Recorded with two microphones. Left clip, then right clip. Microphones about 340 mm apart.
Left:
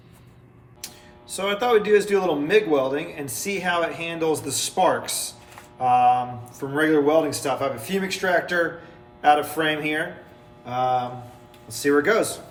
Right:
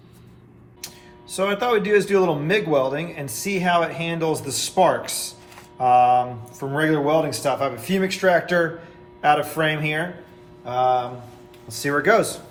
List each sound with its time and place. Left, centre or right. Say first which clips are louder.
1.3 s a man's voice: even; centre